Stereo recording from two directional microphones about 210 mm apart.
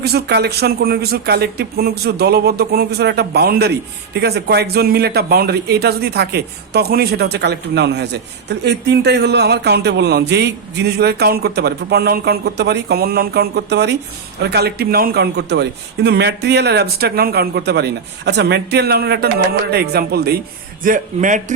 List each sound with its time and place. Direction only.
0.0 s a man's voice: 50° right (ahead or behind)